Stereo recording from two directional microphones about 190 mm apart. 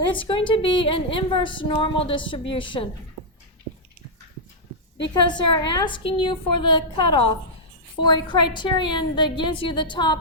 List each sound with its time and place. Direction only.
0.1 s a woman's voice: 25° left (ahead or behind)
5.3 s a woman's voice: 25° left (ahead or behind)